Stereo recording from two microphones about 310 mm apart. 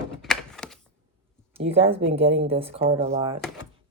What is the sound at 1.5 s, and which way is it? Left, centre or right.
Speech, centre.